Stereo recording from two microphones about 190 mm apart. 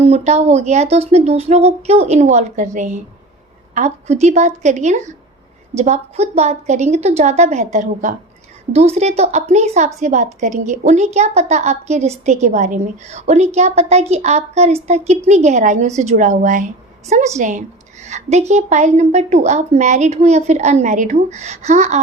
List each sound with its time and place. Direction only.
0.0 s a woman's voice: 35° right (ahead or behind)